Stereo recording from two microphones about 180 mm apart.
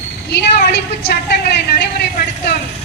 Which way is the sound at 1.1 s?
70° left (ahead or behind).